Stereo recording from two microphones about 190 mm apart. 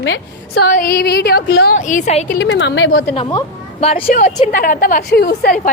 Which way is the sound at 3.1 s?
20° left (ahead or behind).